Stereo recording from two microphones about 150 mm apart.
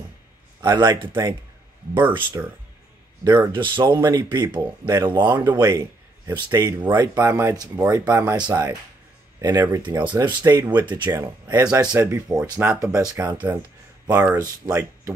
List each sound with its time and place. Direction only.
0.6 s speech: 30° right (ahead or behind)
2.4 s speech: 15° right (ahead or behind)
3.3 s a man's voice: 30° right (ahead or behind)
11.1 s speech: 15° right (ahead or behind)
14.1 s speech: 15° right (ahead or behind)